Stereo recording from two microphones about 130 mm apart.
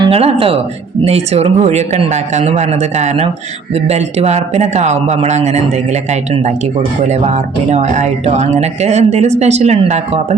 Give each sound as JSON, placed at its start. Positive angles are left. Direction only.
{"t": 0.0, "sound": "speech", "side_deg": -50}